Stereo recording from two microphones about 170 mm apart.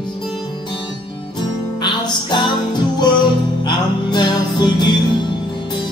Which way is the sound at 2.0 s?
25° left (ahead or behind).